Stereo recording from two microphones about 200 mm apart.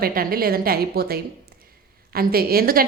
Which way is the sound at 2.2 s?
50° right (ahead or behind).